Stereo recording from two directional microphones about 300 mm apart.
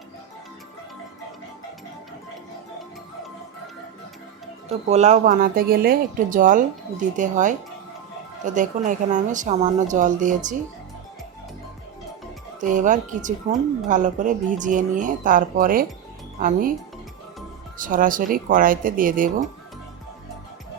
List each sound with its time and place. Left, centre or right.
4.9 s a woman's voice: right
8.5 s a woman's voice: right
12.5 s a woman's voice: right
17.7 s a woman's voice: right